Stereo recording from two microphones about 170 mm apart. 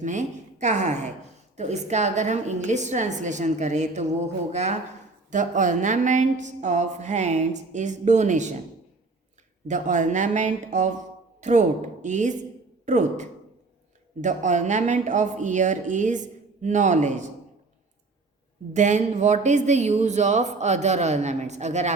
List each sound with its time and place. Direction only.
0.0 s a woman's voice: 45° right (ahead or behind)
9.6 s speech: 50° right (ahead or behind)
18.7 s speech: 45° right (ahead or behind)